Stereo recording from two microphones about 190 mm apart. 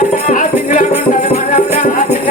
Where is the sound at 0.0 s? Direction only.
40° left (ahead or behind).